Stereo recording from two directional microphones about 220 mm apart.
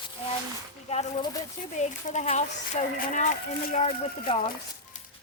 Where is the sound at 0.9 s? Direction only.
30° left (ahead or behind).